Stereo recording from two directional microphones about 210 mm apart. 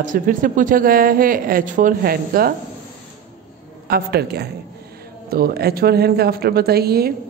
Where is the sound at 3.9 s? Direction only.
50° right (ahead or behind).